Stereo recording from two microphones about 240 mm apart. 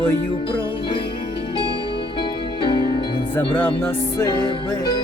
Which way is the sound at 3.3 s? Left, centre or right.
Centre.